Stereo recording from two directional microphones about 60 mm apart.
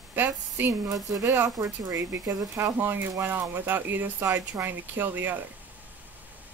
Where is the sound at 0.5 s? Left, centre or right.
Right.